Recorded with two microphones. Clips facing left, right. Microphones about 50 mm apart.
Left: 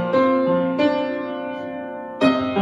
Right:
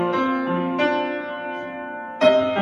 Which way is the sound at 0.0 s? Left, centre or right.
Right.